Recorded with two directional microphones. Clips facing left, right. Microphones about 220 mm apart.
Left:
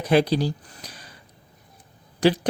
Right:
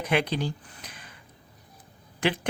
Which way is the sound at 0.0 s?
35° left (ahead or behind).